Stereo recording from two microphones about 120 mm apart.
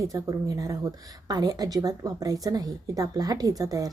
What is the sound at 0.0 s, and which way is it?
A woman's voice, 25° right (ahead or behind).